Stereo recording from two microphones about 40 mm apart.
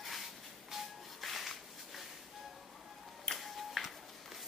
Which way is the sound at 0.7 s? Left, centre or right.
Centre.